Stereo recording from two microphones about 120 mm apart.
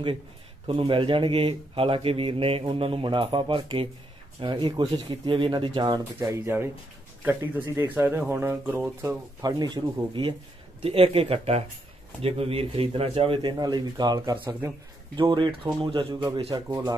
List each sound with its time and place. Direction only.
0.7 s speech: 50° right (ahead or behind)
6.2 s speech: 20° right (ahead or behind)
9.4 s speech: 35° right (ahead or behind)
10.8 s speech: 55° right (ahead or behind)
16.5 s speech: 30° right (ahead or behind)